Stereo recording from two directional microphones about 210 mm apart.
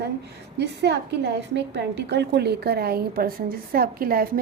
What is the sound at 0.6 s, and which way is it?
A woman's voice, 55° right (ahead or behind).